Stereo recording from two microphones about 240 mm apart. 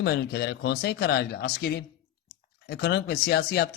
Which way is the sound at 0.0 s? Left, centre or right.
Left.